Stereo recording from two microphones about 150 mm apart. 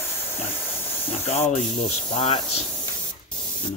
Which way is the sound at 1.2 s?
45° left (ahead or behind).